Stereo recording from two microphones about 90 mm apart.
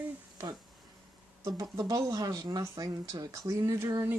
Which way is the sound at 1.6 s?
45° right (ahead or behind).